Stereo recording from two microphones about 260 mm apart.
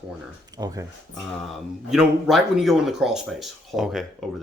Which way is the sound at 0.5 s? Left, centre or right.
Centre.